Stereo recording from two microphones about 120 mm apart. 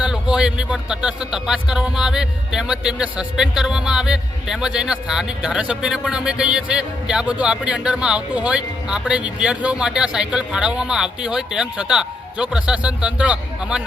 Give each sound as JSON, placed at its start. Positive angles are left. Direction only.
{"t": 0.0, "sound": "speech", "side_deg": -5}